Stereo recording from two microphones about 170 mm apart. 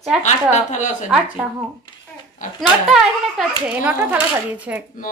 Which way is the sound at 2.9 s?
5° right (ahead or behind).